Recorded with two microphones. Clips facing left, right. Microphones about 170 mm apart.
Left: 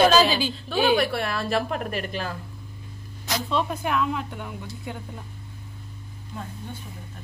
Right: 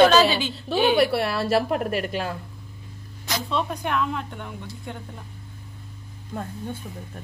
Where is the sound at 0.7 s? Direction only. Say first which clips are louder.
Right 2 dB; 25° right (ahead or behind).